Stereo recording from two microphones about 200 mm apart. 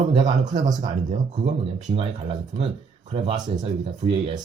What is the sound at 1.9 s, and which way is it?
Speech, 25° right (ahead or behind).